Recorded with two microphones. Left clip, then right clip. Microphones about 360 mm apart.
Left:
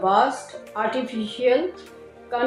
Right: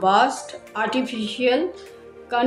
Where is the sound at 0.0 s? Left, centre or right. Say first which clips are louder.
Right 1 dB; right.